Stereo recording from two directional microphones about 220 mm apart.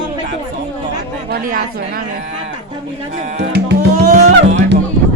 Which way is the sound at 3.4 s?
45° right (ahead or behind).